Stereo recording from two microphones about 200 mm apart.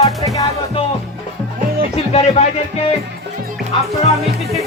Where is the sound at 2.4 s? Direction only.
35° left (ahead or behind).